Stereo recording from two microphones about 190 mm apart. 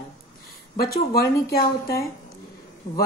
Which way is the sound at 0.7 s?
55° left (ahead or behind).